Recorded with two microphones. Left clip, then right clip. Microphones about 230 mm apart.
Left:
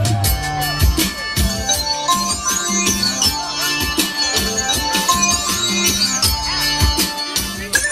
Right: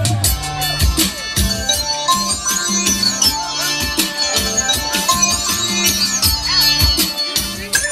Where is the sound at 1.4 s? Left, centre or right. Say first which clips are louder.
Right 2 dB; right.